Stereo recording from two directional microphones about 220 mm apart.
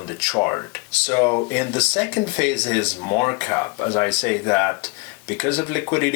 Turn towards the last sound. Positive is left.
turn(degrees=10)  # may be behind; listen again after turning